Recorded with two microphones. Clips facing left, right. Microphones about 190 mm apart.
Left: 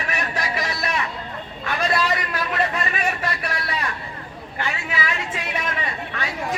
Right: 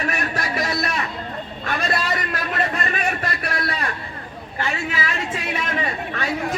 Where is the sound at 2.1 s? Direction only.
45° right (ahead or behind).